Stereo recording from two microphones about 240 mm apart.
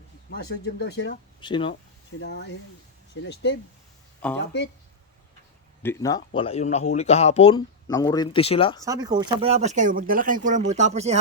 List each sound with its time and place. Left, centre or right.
0.3 s speech: left
1.4 s speech: centre
2.2 s speech: left
4.2 s speech: centre
5.8 s speech: centre
8.8 s speech: centre